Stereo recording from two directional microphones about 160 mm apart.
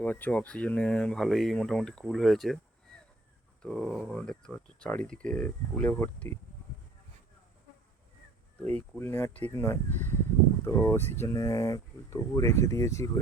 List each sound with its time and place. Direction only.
0.0 s speech: 10° left (ahead or behind)
3.6 s speech: 5° left (ahead or behind)
8.7 s speech: 15° left (ahead or behind)